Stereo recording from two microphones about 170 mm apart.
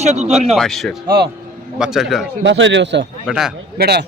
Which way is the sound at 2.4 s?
90° right.